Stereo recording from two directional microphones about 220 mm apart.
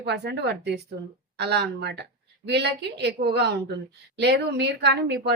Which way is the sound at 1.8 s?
50° right (ahead or behind).